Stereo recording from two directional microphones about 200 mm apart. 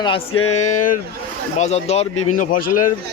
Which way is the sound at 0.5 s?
35° left (ahead or behind).